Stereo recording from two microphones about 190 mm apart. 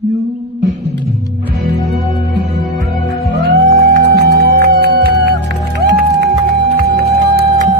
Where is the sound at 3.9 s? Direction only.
60° right (ahead or behind).